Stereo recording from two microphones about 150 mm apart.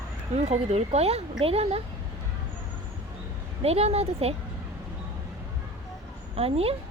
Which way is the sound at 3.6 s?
45° right (ahead or behind).